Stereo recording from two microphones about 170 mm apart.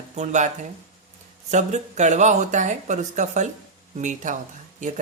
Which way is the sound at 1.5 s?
45° right (ahead or behind).